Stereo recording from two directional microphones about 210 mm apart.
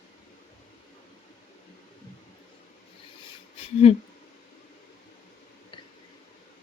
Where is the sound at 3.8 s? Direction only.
30° left (ahead or behind).